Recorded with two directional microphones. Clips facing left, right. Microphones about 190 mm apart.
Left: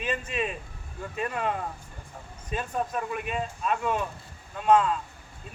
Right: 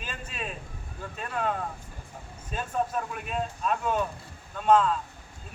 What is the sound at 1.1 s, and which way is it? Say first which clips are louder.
Speech: left 2 dB; 5° left (ahead or behind).